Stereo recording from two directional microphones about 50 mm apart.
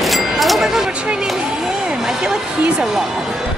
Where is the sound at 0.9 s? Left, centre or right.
Right.